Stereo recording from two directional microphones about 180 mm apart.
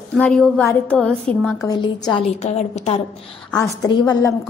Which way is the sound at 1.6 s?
20° left (ahead or behind).